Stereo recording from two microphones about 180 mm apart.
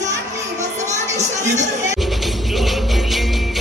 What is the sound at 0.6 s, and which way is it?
Music, 40° right (ahead or behind).